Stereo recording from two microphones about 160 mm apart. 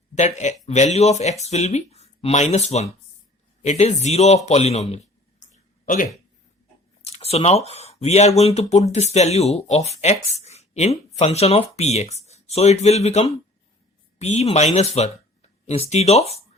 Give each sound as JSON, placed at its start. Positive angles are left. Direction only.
{"t": 0.1, "sound": "speech", "side_deg": 45}
{"t": 5.4, "sound": "a sound", "side_deg": 55}
{"t": 7.0, "sound": "speech", "side_deg": 40}